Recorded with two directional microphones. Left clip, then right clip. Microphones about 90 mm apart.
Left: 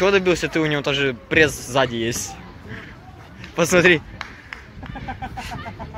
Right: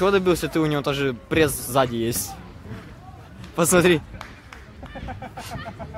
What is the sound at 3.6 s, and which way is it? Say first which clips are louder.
Speech: left 3 dB; 45° right (ahead or behind).